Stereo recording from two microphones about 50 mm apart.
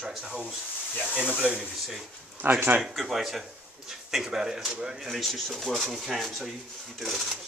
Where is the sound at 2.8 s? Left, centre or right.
Centre.